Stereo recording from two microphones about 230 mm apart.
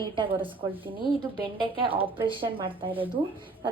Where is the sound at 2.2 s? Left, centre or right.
Right.